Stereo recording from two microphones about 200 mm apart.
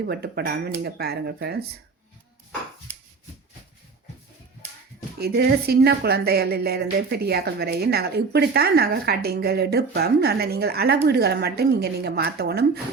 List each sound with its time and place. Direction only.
0.1 s a woman's voice: 55° right (ahead or behind)
5.1 s a woman's voice: 50° right (ahead or behind)